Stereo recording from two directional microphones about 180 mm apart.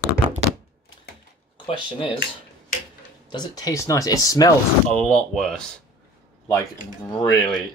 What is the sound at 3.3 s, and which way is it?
Speech, 25° left (ahead or behind).